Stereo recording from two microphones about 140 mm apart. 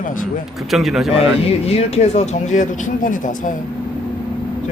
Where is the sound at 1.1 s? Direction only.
45° left (ahead or behind); by 3.6 s 65° left (ahead or behind).